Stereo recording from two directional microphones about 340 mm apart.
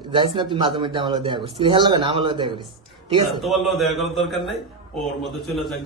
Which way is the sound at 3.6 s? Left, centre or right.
Centre.